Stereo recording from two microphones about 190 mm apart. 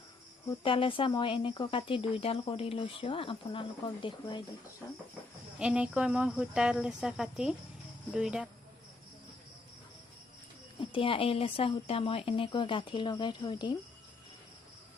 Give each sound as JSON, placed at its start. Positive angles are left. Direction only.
{"t": 0.6, "sound": "speech", "side_deg": 25}
{"t": 5.5, "sound": "speech", "side_deg": -5}
{"t": 10.8, "sound": "speech", "side_deg": 30}